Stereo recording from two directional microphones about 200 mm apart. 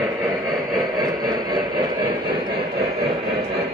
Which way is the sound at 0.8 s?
20° right (ahead or behind).